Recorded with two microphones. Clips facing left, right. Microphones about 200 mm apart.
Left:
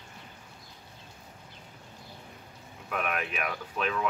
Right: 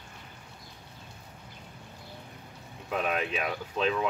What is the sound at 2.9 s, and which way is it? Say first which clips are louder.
Speech: right 3 dB; 25° right (ahead or behind).